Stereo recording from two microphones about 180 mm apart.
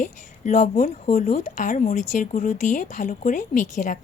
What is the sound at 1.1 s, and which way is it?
Speech, 40° left (ahead or behind).